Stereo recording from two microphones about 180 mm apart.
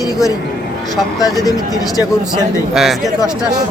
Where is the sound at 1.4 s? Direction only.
20° left (ahead or behind).